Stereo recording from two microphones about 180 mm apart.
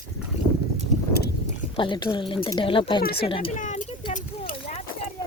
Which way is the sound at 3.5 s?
45° left (ahead or behind).